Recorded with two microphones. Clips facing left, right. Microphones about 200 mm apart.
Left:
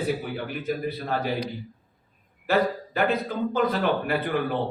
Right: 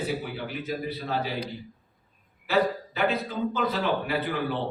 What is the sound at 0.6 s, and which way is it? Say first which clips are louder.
Speech: left 4 dB; 50° left (ahead or behind).